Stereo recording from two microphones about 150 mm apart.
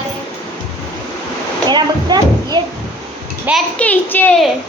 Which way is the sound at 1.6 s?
30° right (ahead or behind).